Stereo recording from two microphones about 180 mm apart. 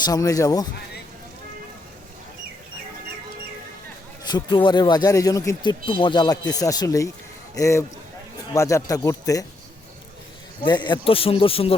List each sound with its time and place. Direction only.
0.0 s speech: 20° left (ahead or behind)
4.3 s speech: 25° left (ahead or behind)
10.6 s speech: 25° left (ahead or behind)